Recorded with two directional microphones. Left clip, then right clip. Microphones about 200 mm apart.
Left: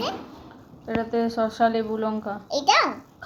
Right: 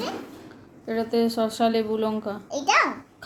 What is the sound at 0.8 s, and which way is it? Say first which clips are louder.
A woman's voice: right 1 dB; 20° right (ahead or behind).